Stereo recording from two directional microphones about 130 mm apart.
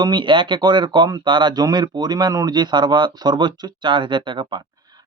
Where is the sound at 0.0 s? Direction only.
35° right (ahead or behind).